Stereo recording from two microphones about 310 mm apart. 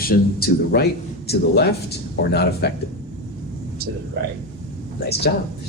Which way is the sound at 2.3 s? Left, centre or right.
Left.